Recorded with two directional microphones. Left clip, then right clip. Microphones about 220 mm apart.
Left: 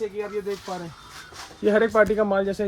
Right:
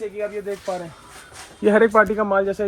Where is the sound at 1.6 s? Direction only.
25° right (ahead or behind).